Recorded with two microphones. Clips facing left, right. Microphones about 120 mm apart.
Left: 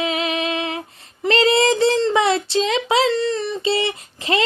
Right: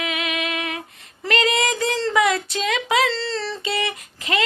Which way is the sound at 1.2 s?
30° left (ahead or behind).